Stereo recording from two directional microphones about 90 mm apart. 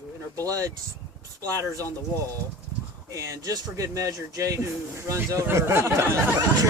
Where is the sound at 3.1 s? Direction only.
35° right (ahead or behind).